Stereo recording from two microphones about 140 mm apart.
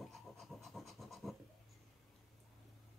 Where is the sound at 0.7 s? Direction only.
Centre (ahead or behind).